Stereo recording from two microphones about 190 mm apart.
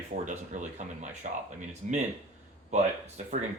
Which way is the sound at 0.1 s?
40° right (ahead or behind).